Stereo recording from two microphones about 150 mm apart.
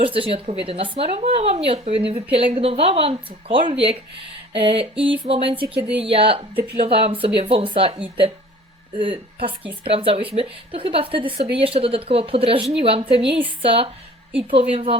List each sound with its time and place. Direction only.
0.0 s speech: 35° right (ahead or behind)